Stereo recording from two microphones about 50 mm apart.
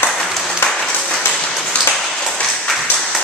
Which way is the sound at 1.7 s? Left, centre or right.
Centre.